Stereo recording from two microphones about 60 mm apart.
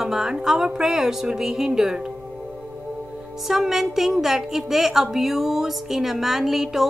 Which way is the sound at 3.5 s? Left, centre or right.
Centre.